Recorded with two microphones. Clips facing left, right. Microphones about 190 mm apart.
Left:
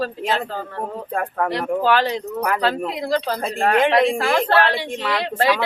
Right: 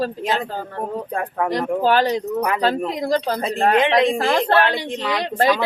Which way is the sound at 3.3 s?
20° right (ahead or behind).